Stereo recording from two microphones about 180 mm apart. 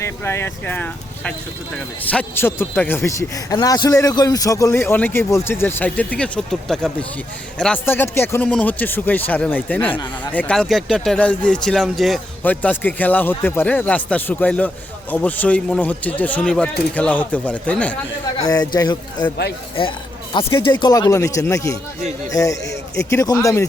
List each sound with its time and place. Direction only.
0.0 s a man's voice: 15° left (ahead or behind)
18.3 s a man's voice: 20° left (ahead or behind)
20.3 s a man's voice: 25° left (ahead or behind)